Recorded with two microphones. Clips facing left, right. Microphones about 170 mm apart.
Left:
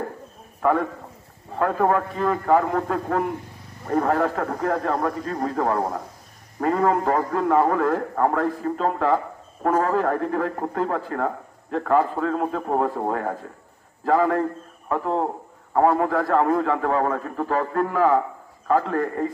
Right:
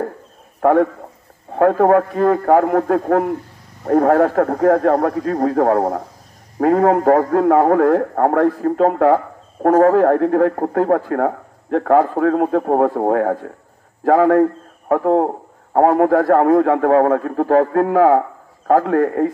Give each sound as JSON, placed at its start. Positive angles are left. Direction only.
{"t": 0.6, "sound": "a man's voice", "side_deg": -55}